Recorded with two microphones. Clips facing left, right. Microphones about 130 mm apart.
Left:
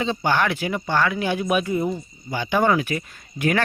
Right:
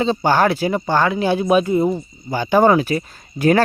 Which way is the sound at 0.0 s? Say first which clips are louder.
Right 6 dB; 35° right (ahead or behind).